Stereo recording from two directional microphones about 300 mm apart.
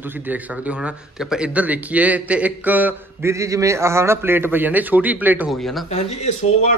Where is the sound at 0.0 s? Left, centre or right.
Centre.